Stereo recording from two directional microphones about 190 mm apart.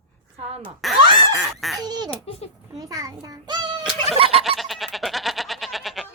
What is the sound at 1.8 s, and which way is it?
A woman's voice, 20° right (ahead or behind).